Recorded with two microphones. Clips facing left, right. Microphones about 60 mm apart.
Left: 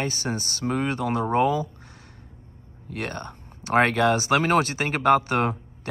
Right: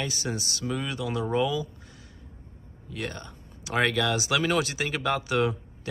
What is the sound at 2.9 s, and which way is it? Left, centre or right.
Speech, left.